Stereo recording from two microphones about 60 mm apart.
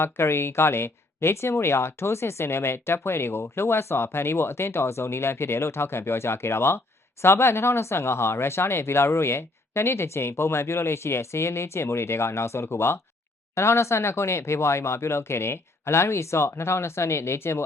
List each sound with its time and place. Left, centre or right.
0.0 s speech: left